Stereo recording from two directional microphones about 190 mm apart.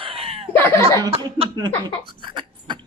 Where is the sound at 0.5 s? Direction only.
10° left (ahead or behind).